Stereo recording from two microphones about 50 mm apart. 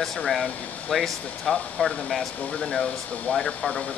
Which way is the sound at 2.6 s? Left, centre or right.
Centre.